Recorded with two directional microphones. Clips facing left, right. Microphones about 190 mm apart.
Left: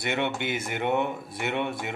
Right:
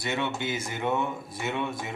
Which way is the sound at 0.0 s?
60° left (ahead or behind).